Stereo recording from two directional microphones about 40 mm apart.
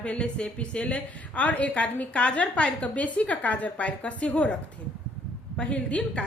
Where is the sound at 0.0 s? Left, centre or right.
Left.